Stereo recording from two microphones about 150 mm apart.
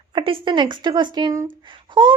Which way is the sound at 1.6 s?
30° right (ahead or behind).